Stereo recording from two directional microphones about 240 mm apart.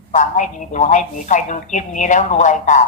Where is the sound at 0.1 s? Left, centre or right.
Left.